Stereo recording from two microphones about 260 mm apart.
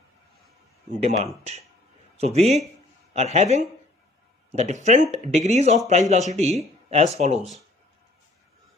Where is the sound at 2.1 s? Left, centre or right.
Right.